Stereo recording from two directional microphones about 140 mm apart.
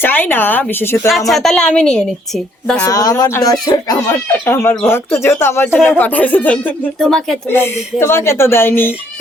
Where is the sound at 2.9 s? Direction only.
25° left (ahead or behind).